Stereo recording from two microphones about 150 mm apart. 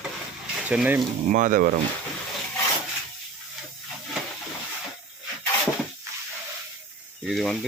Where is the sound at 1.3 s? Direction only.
60° right (ahead or behind).